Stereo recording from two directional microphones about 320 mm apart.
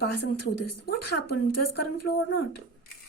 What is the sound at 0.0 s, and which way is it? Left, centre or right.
Speech, left.